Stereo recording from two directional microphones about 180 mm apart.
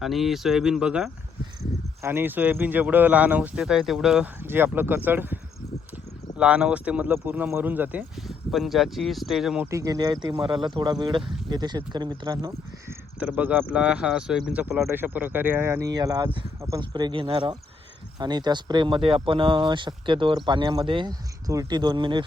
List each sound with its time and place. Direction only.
0.0 s speech: centre (ahead or behind)
9.6 s speech: 20° right (ahead or behind)
13.1 s speech: 5° right (ahead or behind); by 22.2 s 25° right (ahead or behind)